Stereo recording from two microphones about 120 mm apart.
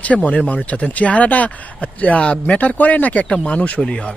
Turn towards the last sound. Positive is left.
turn(degrees=10)  # may be behind; listen again after turning